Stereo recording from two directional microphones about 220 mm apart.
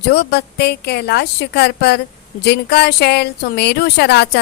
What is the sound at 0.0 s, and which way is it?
Speech, 50° left (ahead or behind).